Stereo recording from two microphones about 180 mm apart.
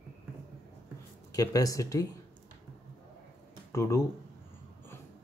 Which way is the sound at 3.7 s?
15° left (ahead or behind).